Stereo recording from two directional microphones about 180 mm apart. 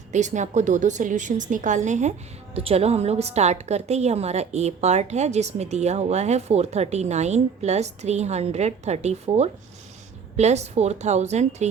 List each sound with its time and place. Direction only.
0.1 s a woman's voice: 40° right (ahead or behind)